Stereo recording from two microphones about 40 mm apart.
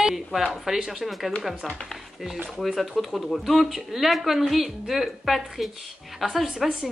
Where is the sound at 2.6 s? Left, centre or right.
Centre.